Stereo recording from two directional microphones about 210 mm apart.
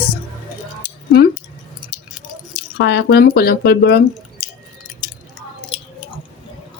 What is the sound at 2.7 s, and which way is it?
Speech, 55° left (ahead or behind).